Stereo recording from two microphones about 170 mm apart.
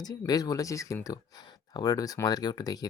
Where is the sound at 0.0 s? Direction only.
25° left (ahead or behind).